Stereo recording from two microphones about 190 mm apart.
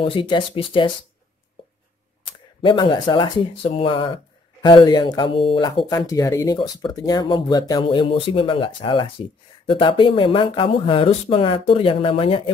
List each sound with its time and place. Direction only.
0.0 s speech: 25° left (ahead or behind)
2.6 s speech: 25° left (ahead or behind)